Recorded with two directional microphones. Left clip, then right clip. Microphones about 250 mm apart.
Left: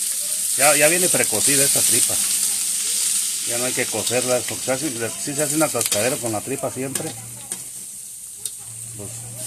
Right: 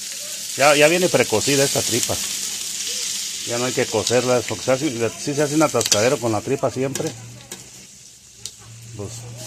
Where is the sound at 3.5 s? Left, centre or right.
Right.